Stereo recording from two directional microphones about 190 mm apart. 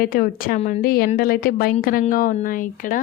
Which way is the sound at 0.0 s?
50° left (ahead or behind).